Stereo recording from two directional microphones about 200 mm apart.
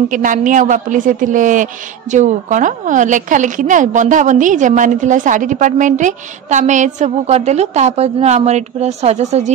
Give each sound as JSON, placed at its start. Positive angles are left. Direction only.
{"t": 0.1, "sound": "a woman's voice", "side_deg": -40}